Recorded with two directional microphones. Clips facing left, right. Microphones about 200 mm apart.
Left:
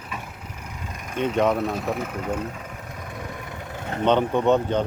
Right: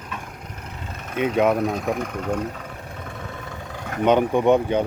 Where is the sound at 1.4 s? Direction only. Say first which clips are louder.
Right 2 dB; 5° right (ahead or behind).